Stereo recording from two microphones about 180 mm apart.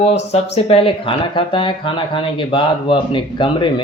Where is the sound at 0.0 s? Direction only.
35° left (ahead or behind).